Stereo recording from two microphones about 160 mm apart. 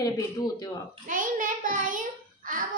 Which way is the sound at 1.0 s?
60° right (ahead or behind).